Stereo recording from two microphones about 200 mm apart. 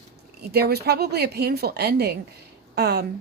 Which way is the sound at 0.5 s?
55° right (ahead or behind).